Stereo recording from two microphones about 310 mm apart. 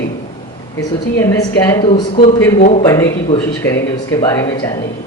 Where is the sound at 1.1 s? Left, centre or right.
Centre.